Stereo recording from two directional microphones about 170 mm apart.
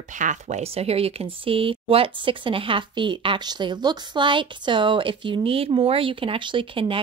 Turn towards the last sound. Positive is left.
turn(degrees=-30)  # may be behind; listen again after turning